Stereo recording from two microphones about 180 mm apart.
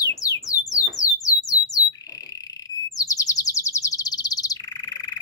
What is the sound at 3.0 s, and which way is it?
Bird, 20° left (ahead or behind).